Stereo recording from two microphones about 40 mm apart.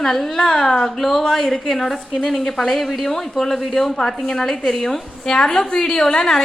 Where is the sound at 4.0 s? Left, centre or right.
Centre.